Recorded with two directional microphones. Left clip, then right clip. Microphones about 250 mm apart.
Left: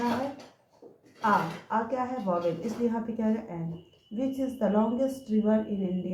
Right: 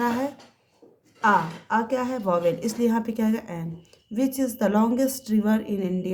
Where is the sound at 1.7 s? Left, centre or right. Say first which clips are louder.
Right 5 dB; right.